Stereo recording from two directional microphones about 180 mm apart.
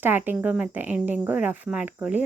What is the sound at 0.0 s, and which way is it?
Speech, 10° right (ahead or behind).